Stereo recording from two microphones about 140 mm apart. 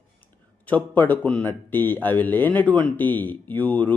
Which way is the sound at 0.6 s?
10° left (ahead or behind).